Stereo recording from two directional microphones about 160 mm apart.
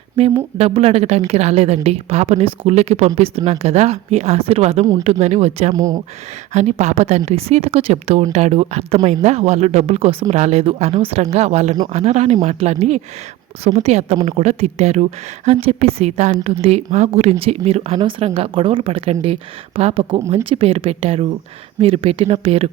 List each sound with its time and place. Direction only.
0.2 s a woman's voice: 40° right (ahead or behind)
5.7 s speech: 20° right (ahead or behind)
6.5 s a woman's voice: 45° right (ahead or behind)